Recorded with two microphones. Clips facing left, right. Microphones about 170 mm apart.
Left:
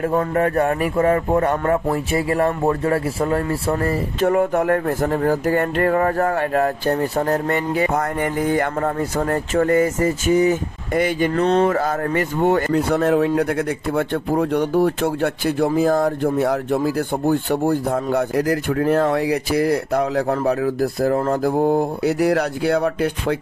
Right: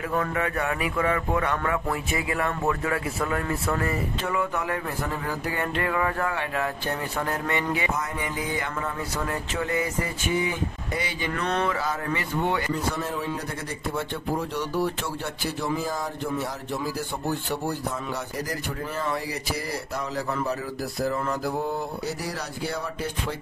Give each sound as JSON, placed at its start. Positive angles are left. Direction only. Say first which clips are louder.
{"t": 0.3, "sound": "speech", "louder": "left 9 dB", "side_deg": 45}
{"t": 4.2, "sound": "speech", "louder": "left 15 dB", "side_deg": 45}
{"t": 7.9, "sound": "speech", "louder": "left 9 dB", "side_deg": 55}
{"t": 11.3, "sound": "speech", "louder": "left 9 dB", "side_deg": 30}
{"t": 11.7, "sound": "speech", "louder": "left 8 dB", "side_deg": 50}
{"t": 12.7, "sound": "speech", "louder": "left 12 dB", "side_deg": 70}